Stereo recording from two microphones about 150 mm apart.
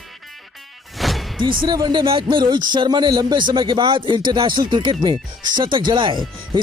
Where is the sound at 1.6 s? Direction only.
25° right (ahead or behind).